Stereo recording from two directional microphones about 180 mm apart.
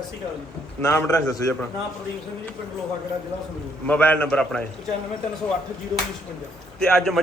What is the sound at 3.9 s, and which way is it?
Speech, 10° left (ahead or behind).